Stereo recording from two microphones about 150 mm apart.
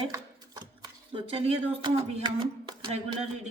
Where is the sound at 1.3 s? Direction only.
40° right (ahead or behind).